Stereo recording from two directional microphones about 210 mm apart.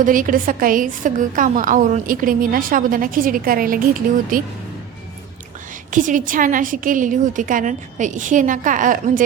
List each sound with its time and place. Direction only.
0.0 s a woman's voice: 40° right (ahead or behind)
5.9 s a woman's voice: 40° right (ahead or behind)